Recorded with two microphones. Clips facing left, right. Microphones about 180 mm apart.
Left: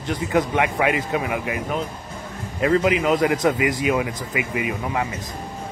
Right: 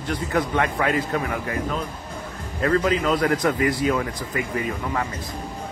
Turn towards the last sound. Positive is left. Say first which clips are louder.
# left 1 dB
turn(degrees=15)  # may be behind; listen again after turning